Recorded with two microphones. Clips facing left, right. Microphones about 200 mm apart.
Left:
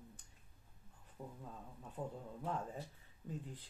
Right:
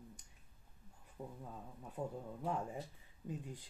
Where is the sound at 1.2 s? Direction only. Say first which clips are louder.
Right 2 dB; 15° right (ahead or behind).